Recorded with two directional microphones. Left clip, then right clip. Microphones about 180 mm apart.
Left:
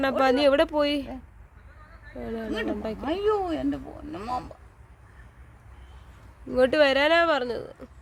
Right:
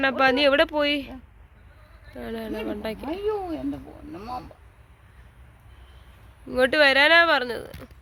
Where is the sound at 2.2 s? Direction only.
10° left (ahead or behind).